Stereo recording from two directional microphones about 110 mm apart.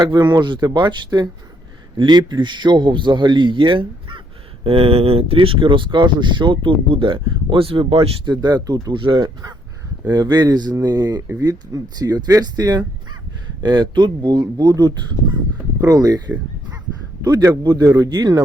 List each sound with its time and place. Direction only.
0.0 s speech: 40° right (ahead or behind); by 8.1 s 60° right (ahead or behind)
8.2 s speech: 40° right (ahead or behind)
9.2 s speech: 30° right (ahead or behind)
17.5 s speech: 35° right (ahead or behind)